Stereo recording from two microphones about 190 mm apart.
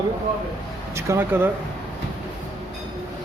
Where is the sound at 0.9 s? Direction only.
15° right (ahead or behind).